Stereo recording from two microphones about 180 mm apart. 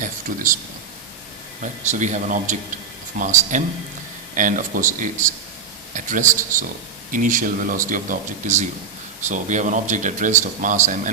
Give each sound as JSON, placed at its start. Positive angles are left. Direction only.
{"t": 0.0, "sound": "speech", "side_deg": -50}
{"t": 1.6, "sound": "speech", "side_deg": -40}